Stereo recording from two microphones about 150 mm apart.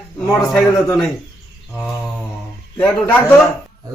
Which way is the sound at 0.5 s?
5° left (ahead or behind).